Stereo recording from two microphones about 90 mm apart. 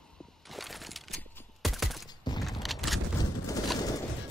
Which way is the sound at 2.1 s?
50° left (ahead or behind).